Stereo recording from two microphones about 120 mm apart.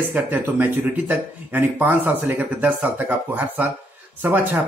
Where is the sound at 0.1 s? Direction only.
15° right (ahead or behind).